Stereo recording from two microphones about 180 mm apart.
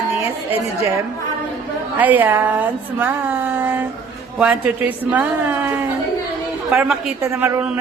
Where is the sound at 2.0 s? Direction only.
10° right (ahead or behind).